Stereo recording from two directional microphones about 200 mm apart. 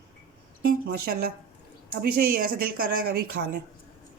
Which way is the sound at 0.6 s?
50° right (ahead or behind).